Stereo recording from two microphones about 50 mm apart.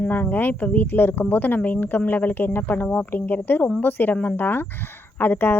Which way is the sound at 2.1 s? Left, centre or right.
Left.